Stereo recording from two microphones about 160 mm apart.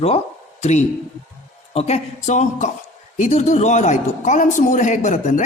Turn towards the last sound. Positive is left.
turn(degrees=50)  # may be behind; listen again after turning